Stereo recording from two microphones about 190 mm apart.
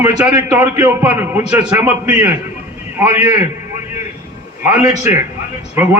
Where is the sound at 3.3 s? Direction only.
15° right (ahead or behind).